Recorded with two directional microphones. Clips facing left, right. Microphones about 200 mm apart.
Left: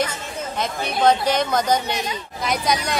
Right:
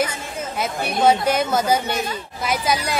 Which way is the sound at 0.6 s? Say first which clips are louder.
Right 1 dB; 5° right (ahead or behind).